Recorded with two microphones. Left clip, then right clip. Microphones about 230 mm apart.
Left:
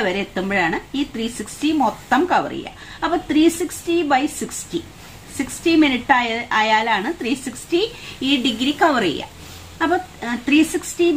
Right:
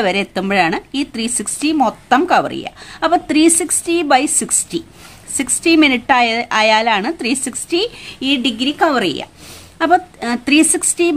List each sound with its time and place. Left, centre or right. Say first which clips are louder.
0.0 s speech: right 5 dB; right
9.8 s speech: right 6 dB; right